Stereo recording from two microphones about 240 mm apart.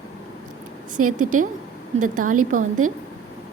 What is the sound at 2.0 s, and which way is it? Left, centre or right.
Speech, right.